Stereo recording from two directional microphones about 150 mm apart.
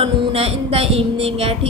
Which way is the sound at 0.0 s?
40° right (ahead or behind).